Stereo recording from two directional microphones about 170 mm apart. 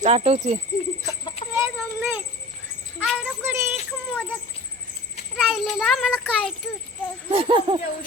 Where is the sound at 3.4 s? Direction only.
15° right (ahead or behind).